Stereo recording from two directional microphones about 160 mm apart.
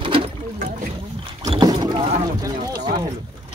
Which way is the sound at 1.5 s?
25° right (ahead or behind).